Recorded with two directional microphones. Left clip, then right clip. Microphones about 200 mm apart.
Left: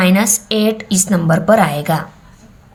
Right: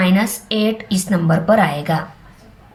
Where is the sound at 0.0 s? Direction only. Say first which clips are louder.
Left 4 dB; 35° left (ahead or behind).